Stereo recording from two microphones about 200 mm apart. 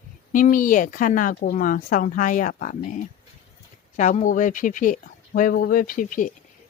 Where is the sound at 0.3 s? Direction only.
40° left (ahead or behind).